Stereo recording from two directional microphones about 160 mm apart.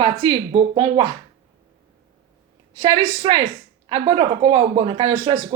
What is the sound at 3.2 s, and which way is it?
Speech, 35° right (ahead or behind).